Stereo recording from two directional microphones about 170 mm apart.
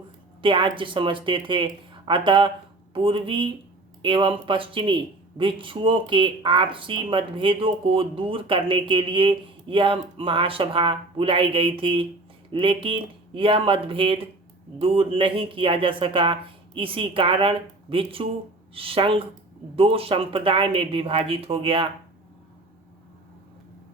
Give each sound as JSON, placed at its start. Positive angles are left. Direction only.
{"t": 0.4, "sound": "speech", "side_deg": -30}